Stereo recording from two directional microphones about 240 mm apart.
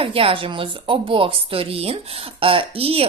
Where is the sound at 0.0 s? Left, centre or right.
Right.